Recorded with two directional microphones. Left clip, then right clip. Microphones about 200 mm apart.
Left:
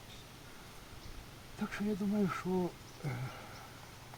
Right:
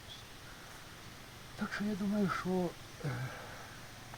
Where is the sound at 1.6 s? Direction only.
5° right (ahead or behind).